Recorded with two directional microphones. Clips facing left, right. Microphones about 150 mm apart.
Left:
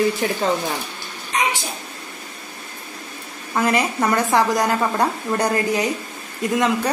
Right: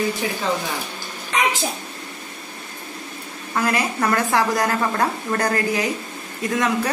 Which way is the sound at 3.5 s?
20° left (ahead or behind).